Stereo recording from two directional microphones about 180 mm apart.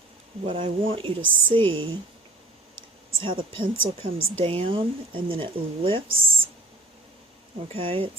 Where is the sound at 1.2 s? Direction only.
90° right.